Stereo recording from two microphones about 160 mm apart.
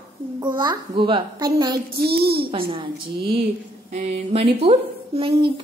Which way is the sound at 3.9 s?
45° right (ahead or behind).